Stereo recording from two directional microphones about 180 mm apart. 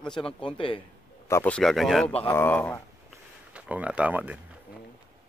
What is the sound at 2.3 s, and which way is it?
Speech, 10° left (ahead or behind).